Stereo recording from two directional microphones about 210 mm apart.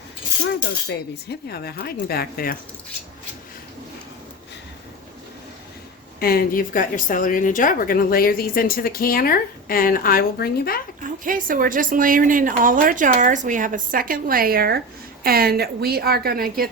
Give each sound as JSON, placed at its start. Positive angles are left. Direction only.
{"t": 0.9, "sound": "speech", "side_deg": 50}
{"t": 6.1, "sound": "speech", "side_deg": 45}
{"t": 11.0, "sound": "a woman's voice", "side_deg": -40}